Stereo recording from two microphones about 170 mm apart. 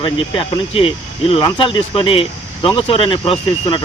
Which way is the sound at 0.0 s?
30° left (ahead or behind).